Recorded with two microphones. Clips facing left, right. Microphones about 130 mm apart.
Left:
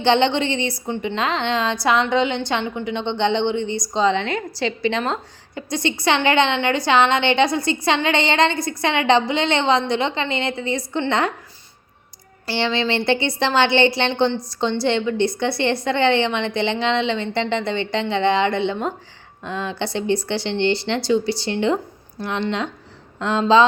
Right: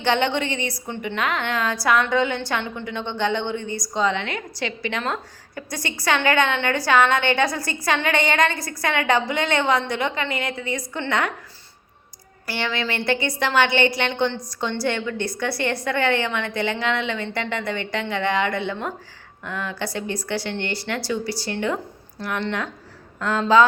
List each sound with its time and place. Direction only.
0.0 s a woman's voice: 25° left (ahead or behind)
12.5 s a woman's voice: 25° left (ahead or behind)